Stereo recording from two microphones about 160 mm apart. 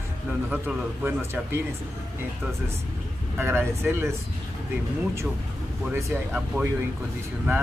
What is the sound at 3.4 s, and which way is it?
Speech, 15° right (ahead or behind).